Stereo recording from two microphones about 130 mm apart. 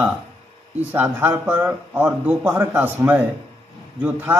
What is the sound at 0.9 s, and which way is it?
Speech, 15° right (ahead or behind).